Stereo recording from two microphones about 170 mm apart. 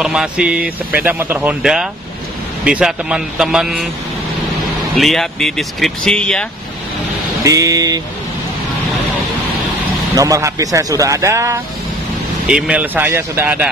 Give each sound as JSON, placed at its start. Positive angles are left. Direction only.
{"t": 0.0, "sound": "speech", "side_deg": -5}
{"t": 4.9, "sound": "speech", "side_deg": 0}
{"t": 7.4, "sound": "speech", "side_deg": -20}
{"t": 10.1, "sound": "speech", "side_deg": -20}
{"t": 12.4, "sound": "speech", "side_deg": -5}